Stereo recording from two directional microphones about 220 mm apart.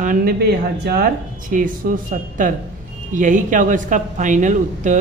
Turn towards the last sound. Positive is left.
turn(degrees=-35)  # may be behind; listen again after turning